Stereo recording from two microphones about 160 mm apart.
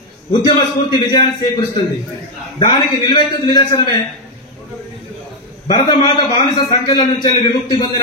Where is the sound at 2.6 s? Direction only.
30° left (ahead or behind).